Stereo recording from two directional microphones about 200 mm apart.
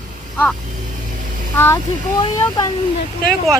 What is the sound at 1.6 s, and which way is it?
Speech, 15° left (ahead or behind).